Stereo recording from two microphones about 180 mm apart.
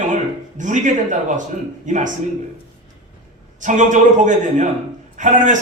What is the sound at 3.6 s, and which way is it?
A man's voice, 45° right (ahead or behind).